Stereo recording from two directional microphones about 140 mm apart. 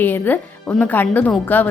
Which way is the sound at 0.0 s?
15° left (ahead or behind).